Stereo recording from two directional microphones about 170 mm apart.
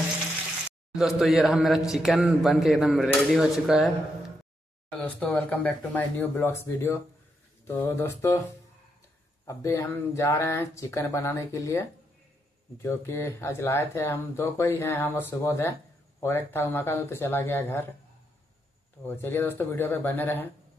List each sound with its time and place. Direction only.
0.9 s speech: centre (ahead or behind)
4.9 s speech: 10° left (ahead or behind)
9.5 s speech: 15° left (ahead or behind)
12.8 s speech: 15° left (ahead or behind)
19.0 s speech: 10° left (ahead or behind)